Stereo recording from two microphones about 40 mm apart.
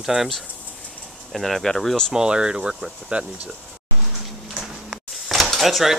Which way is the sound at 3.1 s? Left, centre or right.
Right.